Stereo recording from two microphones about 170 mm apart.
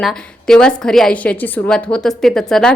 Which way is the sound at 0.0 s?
5° left (ahead or behind).